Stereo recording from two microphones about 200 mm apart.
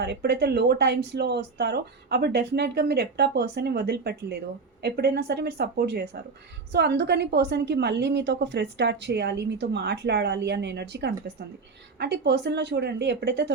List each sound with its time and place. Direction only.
0.0 s a woman's voice: 55° right (ahead or behind)